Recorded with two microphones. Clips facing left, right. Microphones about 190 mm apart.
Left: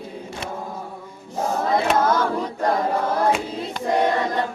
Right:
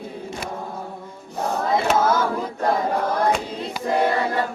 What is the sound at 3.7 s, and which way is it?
Choir, 5° right (ahead or behind).